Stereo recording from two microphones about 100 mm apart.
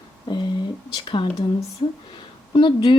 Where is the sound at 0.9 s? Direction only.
55° left (ahead or behind).